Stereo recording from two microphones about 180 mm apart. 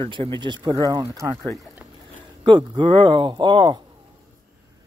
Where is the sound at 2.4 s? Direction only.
25° right (ahead or behind).